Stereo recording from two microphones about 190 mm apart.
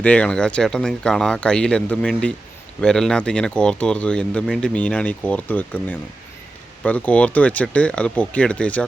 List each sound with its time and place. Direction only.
0.0 s speech: 5° left (ahead or behind)